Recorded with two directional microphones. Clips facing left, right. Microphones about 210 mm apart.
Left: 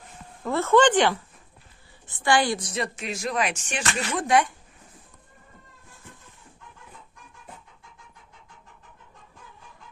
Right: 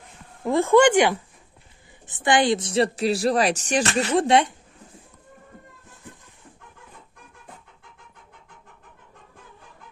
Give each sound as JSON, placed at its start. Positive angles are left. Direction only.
{"t": 0.4, "sound": "speech", "side_deg": -15}